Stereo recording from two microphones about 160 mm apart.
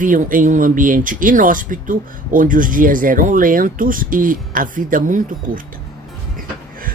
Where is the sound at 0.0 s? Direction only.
55° right (ahead or behind).